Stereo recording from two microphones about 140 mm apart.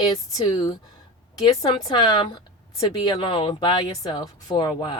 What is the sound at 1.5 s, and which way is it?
Speech, 30° left (ahead or behind).